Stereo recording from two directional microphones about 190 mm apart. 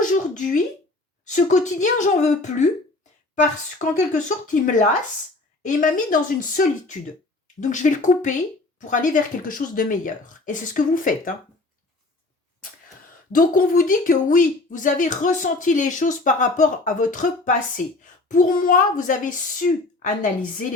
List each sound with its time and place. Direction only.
0.0 s a sound: 40° left (ahead or behind)
1.2 s a woman's voice: 40° left (ahead or behind)
13.3 s a child's voice: 45° left (ahead or behind)